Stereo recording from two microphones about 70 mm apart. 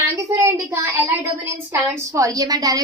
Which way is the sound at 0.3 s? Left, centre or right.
Right.